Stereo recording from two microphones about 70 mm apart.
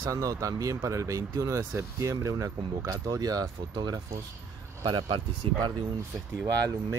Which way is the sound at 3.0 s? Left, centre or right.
Right.